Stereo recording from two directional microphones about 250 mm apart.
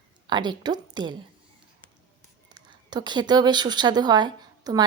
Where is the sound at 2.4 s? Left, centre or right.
Centre.